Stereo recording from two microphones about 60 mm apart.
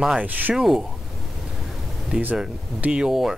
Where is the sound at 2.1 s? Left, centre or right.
Right.